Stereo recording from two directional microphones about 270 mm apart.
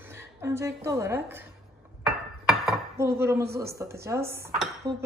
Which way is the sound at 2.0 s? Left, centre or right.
Centre.